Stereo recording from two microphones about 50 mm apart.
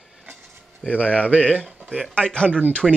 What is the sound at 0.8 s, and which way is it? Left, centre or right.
Speech, right.